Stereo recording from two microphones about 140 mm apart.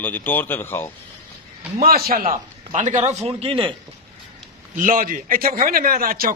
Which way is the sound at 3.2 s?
45° right (ahead or behind).